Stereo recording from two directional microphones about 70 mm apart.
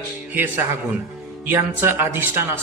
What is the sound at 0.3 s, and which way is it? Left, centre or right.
Speech, right.